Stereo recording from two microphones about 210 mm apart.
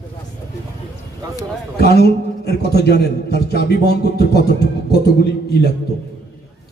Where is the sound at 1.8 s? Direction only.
50° left (ahead or behind).